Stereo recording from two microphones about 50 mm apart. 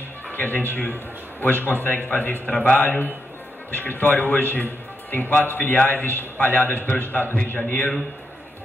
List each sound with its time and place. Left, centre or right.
0.3 s a man's voice: left
2.4 s a man's voice: left
3.7 s a man's voice: left